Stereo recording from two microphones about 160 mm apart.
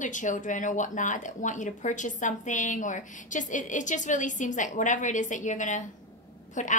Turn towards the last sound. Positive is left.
turn(degrees=50)  # may be behind; listen again after turning